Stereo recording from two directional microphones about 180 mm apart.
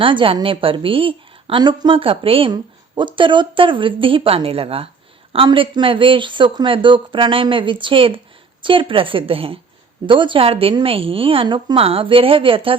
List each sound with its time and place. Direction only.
0.0 s a woman's voice: 30° right (ahead or behind)